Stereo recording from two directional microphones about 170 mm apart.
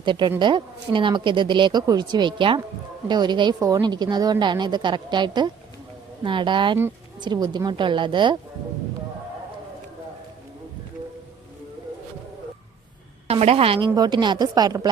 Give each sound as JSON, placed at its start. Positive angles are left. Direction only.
{"t": 0.0, "sound": "speech", "side_deg": -25}
{"t": 13.2, "sound": "speech", "side_deg": -35}